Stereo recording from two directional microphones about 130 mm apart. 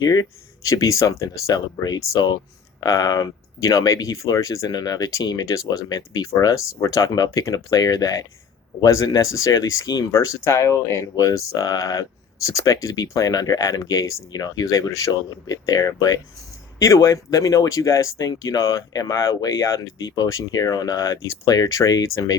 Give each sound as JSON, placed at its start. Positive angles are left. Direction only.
{"t": 0.0, "sound": "speech", "side_deg": 30}